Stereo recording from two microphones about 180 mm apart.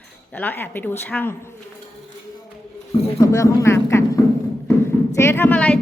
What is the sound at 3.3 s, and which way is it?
A woman's voice, 15° left (ahead or behind).